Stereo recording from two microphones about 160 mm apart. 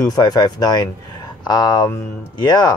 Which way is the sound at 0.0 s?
25° left (ahead or behind).